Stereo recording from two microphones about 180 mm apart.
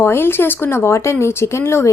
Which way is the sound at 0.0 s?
15° left (ahead or behind).